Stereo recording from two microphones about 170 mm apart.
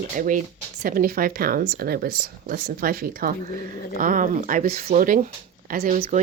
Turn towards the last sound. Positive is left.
turn(degrees=-50)  # may be behind; listen again after turning